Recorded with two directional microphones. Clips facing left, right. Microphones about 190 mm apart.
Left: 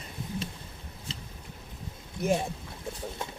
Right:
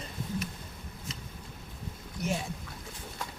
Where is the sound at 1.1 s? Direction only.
30° left (ahead or behind).